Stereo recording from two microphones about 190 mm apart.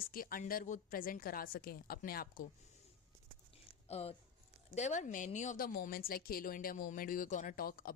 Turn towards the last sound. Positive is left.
turn(degrees=50)  # may be behind; listen again after turning